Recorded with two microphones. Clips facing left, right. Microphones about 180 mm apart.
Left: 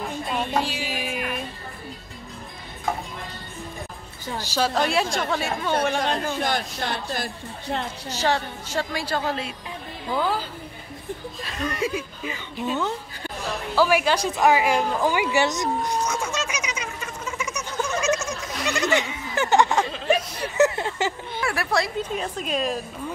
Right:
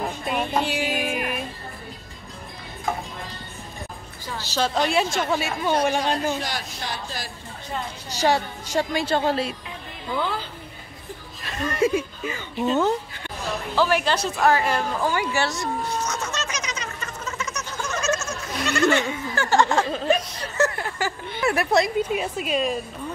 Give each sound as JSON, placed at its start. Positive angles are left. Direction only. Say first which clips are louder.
{"t": 0.7, "sound": "music", "louder": "right 4 dB", "side_deg": -50}
{"t": 4.4, "sound": "speech", "louder": "even", "side_deg": 10}
{"t": 6.4, "sound": "a woman's voice", "louder": "left 5 dB", "side_deg": 55}
{"t": 8.1, "sound": "a woman's voice", "louder": "right 3 dB", "side_deg": -15}
{"t": 11.7, "sound": "speech", "louder": "right 10 dB", "side_deg": -50}
{"t": 13.7, "sound": "a woman's voice", "louder": "left 2 dB", "side_deg": 10}
{"t": 16.1, "sound": "a sound", "louder": "left 2 dB", "side_deg": 10}
{"t": 21.4, "sound": "speech", "louder": "right 5 dB", "side_deg": -20}